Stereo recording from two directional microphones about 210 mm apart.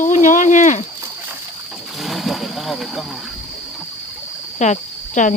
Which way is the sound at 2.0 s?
Centre (ahead or behind).